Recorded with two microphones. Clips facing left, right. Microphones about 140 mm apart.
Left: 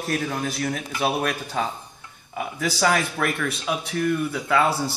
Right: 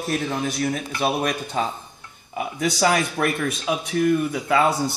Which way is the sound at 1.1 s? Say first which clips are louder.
Right 1 dB; 10° right (ahead or behind).